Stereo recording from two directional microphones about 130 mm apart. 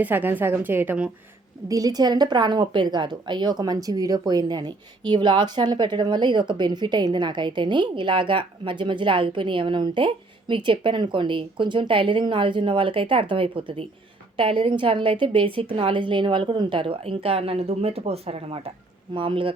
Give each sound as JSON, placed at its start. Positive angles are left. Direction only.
{"t": 0.0, "sound": "a woman's voice", "side_deg": -15}
{"t": 1.6, "sound": "a woman's voice", "side_deg": -25}